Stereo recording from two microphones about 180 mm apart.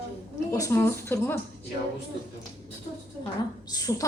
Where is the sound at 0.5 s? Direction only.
15° left (ahead or behind).